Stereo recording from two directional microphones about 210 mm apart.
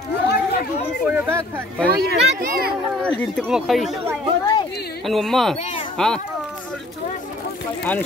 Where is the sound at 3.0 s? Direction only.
5° left (ahead or behind).